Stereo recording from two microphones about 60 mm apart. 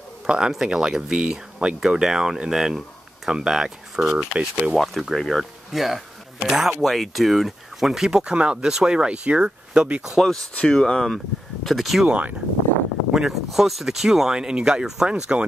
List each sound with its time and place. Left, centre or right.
0.3 s speech: centre
4.3 s speech: centre
4.7 s speech: centre
10.3 s speech: centre
11.6 s speech: centre
12.1 s speech: right
13.1 s speech: centre